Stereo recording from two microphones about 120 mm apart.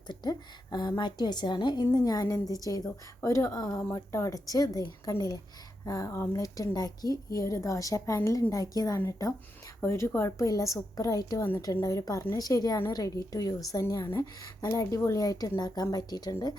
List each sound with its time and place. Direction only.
0.1 s a woman's voice: 35° left (ahead or behind)